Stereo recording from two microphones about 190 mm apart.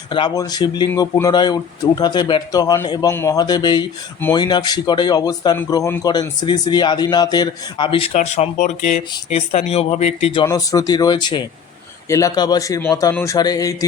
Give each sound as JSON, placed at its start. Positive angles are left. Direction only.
{"t": 0.1, "sound": "speech", "side_deg": 25}
{"t": 10.4, "sound": "speech", "side_deg": 20}